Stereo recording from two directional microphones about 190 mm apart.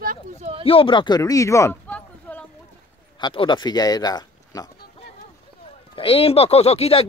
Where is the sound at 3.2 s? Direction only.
25° left (ahead or behind).